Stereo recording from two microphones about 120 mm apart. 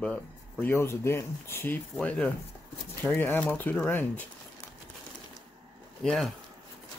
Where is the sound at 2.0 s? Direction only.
5° left (ahead or behind).